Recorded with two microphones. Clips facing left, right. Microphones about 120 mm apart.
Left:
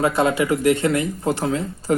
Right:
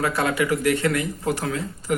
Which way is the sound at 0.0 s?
25° left (ahead or behind).